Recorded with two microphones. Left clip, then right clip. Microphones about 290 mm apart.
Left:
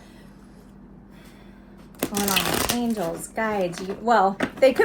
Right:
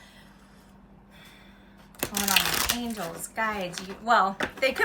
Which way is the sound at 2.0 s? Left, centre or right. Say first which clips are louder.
Left 1 dB; centre.